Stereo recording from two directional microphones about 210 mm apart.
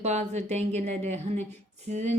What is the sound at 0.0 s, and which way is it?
Speech, 35° right (ahead or behind).